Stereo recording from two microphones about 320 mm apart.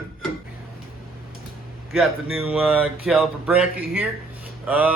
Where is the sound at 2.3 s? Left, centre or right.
Centre.